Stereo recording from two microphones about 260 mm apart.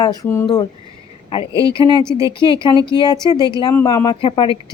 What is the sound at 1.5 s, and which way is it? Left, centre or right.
Speech, centre.